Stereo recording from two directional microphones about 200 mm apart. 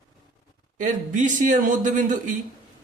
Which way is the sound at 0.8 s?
40° right (ahead or behind).